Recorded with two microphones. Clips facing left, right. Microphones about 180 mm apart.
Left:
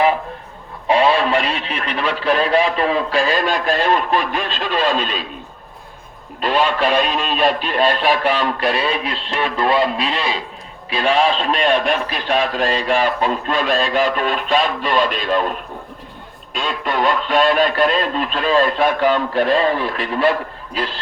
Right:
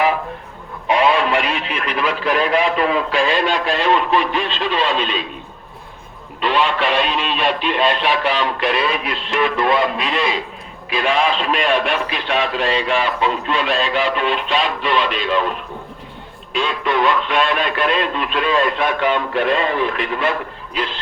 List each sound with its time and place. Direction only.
0.9 s speech: 35° left (ahead or behind)
6.4 s speech: 40° left (ahead or behind)
16.8 s speech: 40° left (ahead or behind)